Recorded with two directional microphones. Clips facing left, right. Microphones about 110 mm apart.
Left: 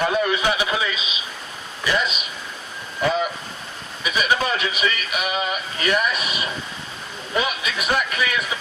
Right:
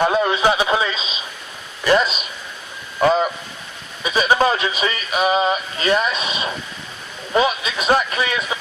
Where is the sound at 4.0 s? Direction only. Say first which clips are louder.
Right 5 dB; 30° right (ahead or behind).